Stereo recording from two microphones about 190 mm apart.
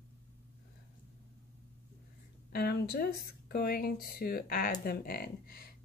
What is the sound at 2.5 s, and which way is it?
Speech, 55° left (ahead or behind).